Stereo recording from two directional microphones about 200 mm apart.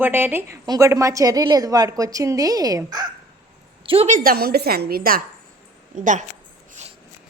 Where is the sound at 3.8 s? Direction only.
30° right (ahead or behind).